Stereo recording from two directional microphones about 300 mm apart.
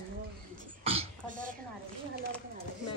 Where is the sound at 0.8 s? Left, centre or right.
Centre.